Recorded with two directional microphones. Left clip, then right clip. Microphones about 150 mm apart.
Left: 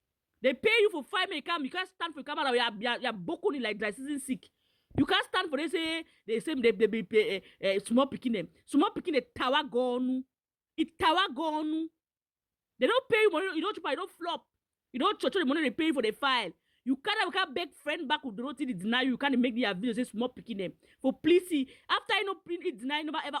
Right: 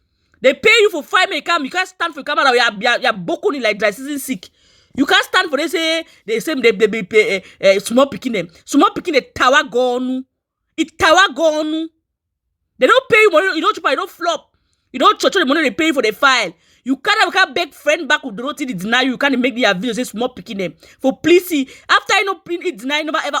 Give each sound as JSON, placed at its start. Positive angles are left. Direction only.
{"t": 0.4, "sound": "speech", "side_deg": 45}